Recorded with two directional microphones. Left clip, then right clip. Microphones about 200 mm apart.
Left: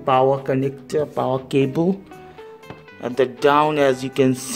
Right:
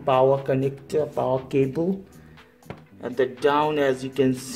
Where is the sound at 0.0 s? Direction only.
35° left (ahead or behind).